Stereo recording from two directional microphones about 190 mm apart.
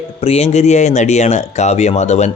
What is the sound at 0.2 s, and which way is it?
Speech, 35° left (ahead or behind).